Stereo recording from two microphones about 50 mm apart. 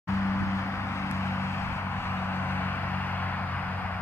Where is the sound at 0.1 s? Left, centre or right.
Left.